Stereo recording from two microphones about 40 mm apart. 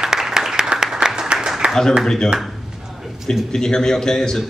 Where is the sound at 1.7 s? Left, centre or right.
Centre.